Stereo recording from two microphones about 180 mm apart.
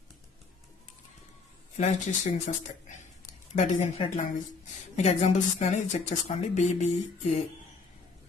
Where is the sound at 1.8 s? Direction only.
40° left (ahead or behind).